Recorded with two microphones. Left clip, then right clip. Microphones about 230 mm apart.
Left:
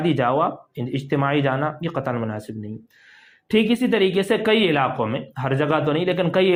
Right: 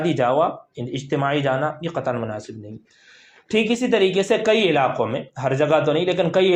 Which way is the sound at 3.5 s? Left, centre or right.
Left.